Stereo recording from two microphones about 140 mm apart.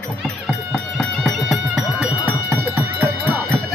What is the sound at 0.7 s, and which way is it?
Music, 5° left (ahead or behind).